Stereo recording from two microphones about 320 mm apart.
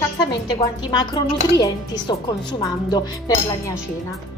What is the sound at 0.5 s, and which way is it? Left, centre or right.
Speech, centre.